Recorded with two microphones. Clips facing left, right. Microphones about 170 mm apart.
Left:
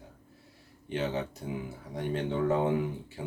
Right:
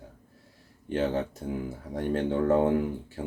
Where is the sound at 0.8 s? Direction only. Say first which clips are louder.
Right 4 dB; 50° right (ahead or behind).